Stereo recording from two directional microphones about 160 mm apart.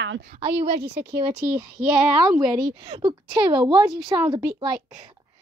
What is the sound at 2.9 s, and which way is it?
Speech, 25° right (ahead or behind).